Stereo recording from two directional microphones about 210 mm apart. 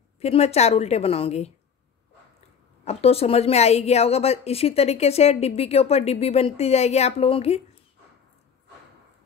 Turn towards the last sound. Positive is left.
turn(degrees=30)  # may be behind; listen again after turning